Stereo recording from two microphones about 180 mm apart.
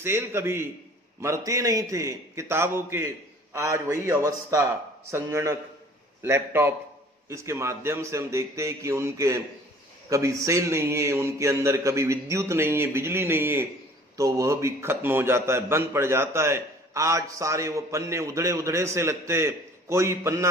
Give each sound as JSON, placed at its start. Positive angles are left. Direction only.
{"t": 0.0, "sound": "a man's voice", "side_deg": -15}